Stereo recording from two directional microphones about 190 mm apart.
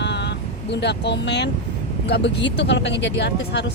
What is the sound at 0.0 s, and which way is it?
Vehicle, 65° left (ahead or behind).